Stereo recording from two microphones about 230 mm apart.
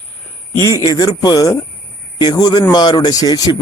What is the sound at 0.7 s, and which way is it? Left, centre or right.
A man's voice, centre.